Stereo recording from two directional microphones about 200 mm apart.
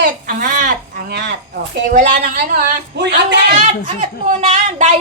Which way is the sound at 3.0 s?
60° right (ahead or behind).